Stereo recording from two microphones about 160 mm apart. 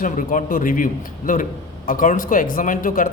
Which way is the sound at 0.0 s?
55° left (ahead or behind).